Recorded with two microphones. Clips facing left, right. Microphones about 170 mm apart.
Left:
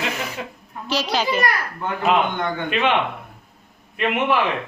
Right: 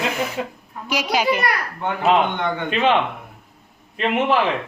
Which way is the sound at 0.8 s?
15° right (ahead or behind).